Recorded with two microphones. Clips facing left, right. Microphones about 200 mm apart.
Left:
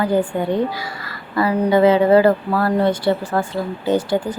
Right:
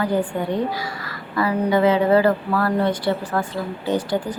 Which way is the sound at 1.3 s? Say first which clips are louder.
Left 3 dB; 30° left (ahead or behind).